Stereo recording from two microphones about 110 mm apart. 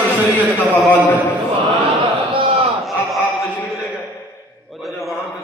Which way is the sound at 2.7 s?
Centre (ahead or behind).